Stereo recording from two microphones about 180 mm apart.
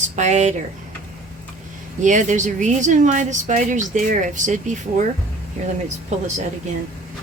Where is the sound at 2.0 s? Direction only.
45° right (ahead or behind).